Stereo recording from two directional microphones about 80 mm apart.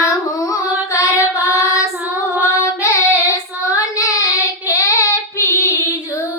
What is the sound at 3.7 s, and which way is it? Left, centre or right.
Child singing, left.